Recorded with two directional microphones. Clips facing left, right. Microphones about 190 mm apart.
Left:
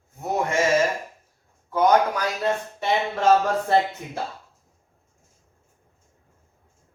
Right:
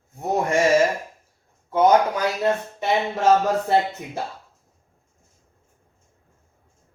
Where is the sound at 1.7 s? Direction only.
25° right (ahead or behind).